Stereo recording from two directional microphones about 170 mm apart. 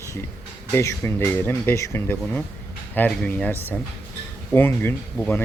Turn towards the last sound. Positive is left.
turn(degrees=10)  # may be behind; listen again after turning